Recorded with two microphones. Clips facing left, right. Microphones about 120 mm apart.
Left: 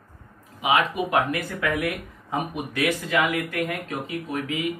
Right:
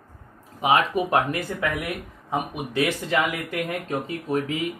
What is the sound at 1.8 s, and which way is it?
Speech, 25° right (ahead or behind).